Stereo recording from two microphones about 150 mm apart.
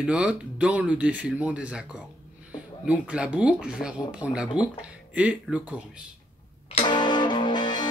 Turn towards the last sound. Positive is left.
turn(degrees=30)  # may be behind; listen again after turning